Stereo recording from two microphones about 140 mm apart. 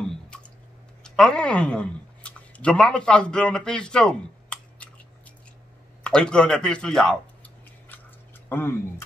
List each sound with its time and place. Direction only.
0.0 s drip: 5° left (ahead or behind)
1.0 s speech: 5° left (ahead or behind)
6.0 s a sound: 5° left (ahead or behind)
8.5 s speech: 15° left (ahead or behind)